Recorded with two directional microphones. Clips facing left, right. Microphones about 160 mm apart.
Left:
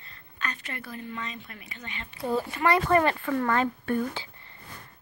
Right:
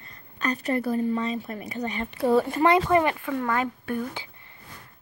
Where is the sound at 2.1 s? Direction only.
70° right (ahead or behind).